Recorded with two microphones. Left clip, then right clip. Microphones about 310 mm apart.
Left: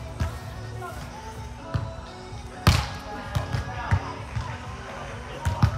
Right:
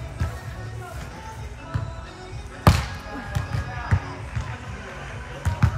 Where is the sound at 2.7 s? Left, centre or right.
Centre.